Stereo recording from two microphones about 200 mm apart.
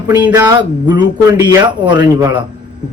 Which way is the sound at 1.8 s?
20° right (ahead or behind).